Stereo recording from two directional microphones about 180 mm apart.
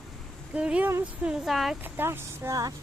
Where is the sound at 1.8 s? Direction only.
10° right (ahead or behind).